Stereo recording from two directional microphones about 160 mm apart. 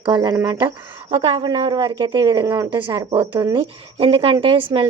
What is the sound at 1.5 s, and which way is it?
Speech, 25° right (ahead or behind).